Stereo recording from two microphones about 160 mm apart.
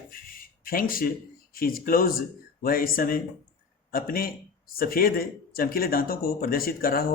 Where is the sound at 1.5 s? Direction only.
65° left (ahead or behind).